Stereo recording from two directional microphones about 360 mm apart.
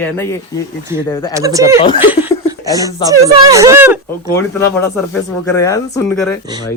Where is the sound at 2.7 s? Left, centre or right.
Centre.